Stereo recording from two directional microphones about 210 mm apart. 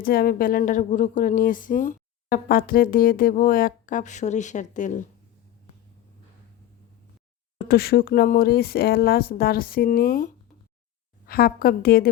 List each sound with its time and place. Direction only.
0.0 s speech: 45° left (ahead or behind)
7.7 s speech: 45° left (ahead or behind)
11.3 s speech: 45° left (ahead or behind)